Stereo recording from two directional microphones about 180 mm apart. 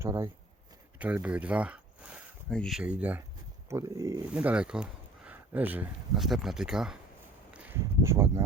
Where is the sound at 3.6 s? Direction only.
15° right (ahead or behind).